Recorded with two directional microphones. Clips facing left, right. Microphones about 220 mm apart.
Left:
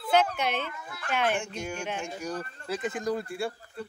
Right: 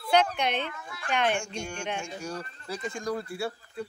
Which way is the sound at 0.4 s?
5° left (ahead or behind).